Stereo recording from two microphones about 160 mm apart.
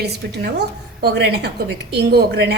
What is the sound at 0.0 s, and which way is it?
A woman's voice, 90° right.